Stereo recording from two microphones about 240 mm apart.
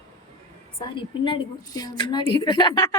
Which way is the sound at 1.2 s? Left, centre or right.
Centre.